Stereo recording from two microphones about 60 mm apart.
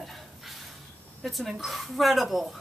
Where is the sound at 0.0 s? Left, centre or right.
Centre.